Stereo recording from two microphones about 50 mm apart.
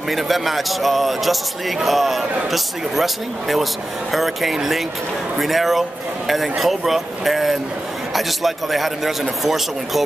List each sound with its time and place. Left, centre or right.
0.1 s a man's voice: centre